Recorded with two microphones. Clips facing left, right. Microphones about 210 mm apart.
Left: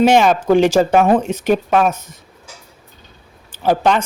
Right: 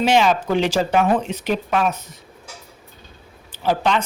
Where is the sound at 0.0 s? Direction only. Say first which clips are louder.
Left 5 dB; 50° left (ahead or behind).